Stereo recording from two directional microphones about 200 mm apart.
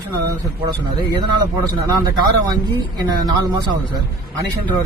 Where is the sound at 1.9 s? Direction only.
20° right (ahead or behind).